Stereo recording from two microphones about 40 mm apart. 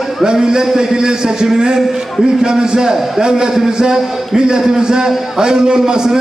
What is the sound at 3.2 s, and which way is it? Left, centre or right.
A man's voice, centre.